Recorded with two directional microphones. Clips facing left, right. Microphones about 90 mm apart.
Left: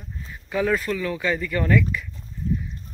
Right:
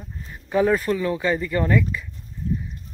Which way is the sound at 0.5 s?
30° right (ahead or behind).